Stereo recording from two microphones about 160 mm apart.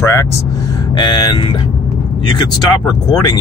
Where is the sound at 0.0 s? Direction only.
15° left (ahead or behind).